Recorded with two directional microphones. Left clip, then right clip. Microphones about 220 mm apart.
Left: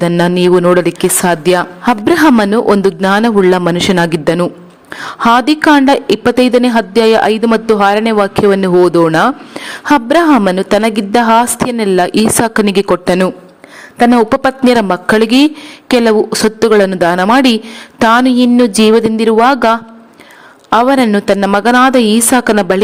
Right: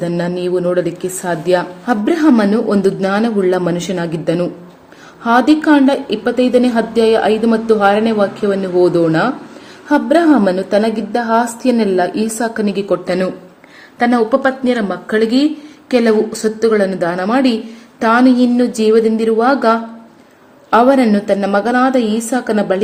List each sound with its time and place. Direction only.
0.0 s a woman's voice: 50° left (ahead or behind)